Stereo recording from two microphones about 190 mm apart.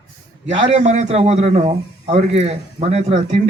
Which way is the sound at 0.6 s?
35° right (ahead or behind).